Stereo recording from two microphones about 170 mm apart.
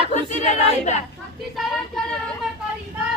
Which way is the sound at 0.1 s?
45° left (ahead or behind).